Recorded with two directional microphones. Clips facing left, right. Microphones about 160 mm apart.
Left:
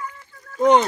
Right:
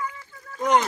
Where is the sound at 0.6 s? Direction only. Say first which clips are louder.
Left 6 dB; 30° left (ahead or behind).